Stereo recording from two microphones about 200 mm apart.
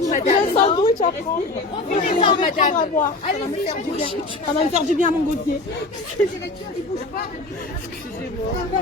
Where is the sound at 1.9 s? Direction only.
35° left (ahead or behind).